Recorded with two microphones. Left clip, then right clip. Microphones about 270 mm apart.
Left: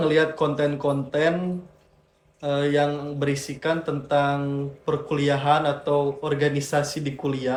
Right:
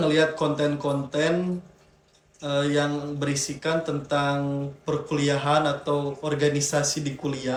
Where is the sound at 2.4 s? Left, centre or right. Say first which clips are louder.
Left 2 dB; left.